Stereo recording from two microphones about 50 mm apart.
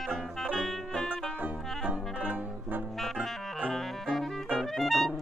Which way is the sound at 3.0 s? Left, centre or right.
Centre.